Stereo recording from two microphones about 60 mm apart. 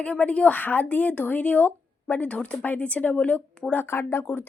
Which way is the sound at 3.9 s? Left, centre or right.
Left.